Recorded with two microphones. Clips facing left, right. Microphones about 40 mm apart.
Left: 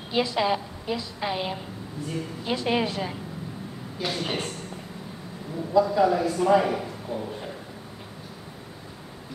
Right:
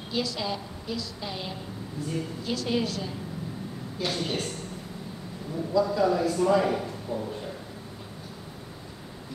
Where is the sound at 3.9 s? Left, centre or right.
Centre.